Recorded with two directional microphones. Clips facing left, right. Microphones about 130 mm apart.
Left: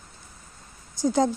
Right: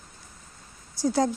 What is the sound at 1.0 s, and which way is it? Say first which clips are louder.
Speech: left 2 dB; 20° left (ahead or behind).